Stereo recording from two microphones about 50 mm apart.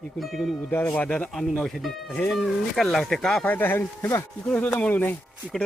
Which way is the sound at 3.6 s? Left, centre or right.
Left.